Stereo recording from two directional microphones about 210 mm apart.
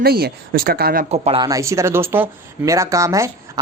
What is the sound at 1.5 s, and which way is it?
Speech, 15° right (ahead or behind).